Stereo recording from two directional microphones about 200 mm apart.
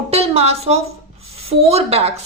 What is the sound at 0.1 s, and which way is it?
A woman's voice, 30° right (ahead or behind).